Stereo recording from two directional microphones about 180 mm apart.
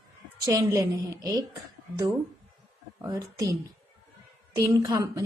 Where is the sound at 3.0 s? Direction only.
20° right (ahead or behind).